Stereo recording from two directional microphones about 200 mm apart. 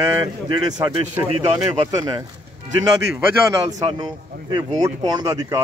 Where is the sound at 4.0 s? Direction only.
20° right (ahead or behind).